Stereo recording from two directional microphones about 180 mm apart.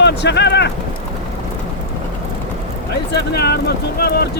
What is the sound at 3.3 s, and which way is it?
Speech, 60° left (ahead or behind).